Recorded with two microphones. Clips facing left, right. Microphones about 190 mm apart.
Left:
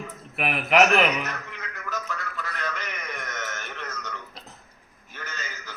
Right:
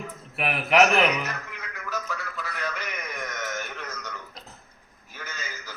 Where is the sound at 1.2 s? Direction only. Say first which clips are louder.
Even; 10° right (ahead or behind).